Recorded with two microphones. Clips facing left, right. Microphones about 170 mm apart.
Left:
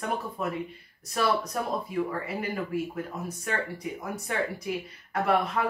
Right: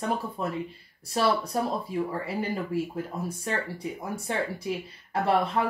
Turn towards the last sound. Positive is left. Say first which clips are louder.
# right 1 dB
turn(degrees=-30)  # may be behind; listen again after turning